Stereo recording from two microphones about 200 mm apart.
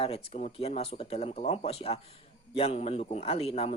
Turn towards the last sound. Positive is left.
turn(degrees=30)  # may be behind; listen again after turning